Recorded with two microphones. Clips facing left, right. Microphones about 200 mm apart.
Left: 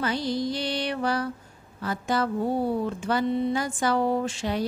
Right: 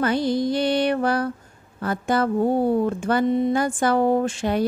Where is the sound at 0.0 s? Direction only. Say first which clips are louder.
Right 6 dB; 55° right (ahead or behind).